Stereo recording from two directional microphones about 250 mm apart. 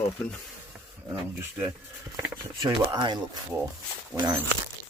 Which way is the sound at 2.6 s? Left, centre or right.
Centre.